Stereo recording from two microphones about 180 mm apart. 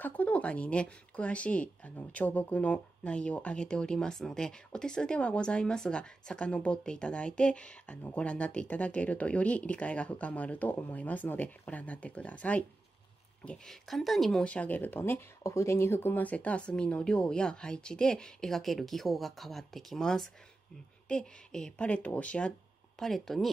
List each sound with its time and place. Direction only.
0.0 s speech: 10° left (ahead or behind)